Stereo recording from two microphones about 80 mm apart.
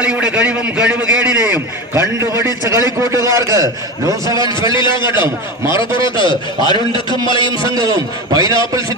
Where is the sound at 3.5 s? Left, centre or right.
Right.